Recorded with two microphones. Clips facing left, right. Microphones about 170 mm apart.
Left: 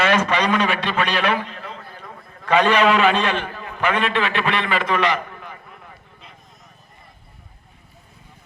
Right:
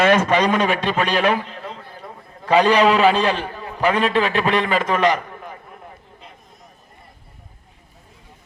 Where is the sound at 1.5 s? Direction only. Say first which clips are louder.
Right 2 dB; 25° right (ahead or behind).